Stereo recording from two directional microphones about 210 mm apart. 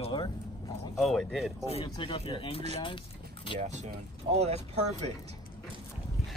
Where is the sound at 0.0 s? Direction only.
20° left (ahead or behind).